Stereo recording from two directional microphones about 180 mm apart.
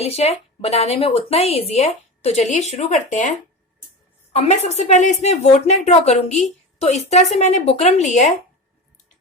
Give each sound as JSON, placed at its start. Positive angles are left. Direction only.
{"t": 0.0, "sound": "a woman's voice", "side_deg": 35}
{"t": 4.3, "sound": "a woman's voice", "side_deg": 35}